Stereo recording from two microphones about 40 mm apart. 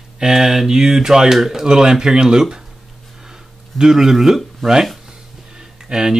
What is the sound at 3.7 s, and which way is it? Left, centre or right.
Speech, centre.